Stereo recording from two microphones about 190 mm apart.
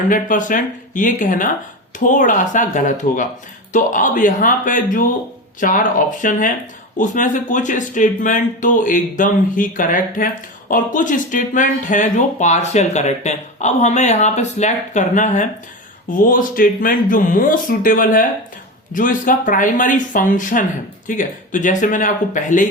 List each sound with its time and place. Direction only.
0.1 s speech: 45° left (ahead or behind)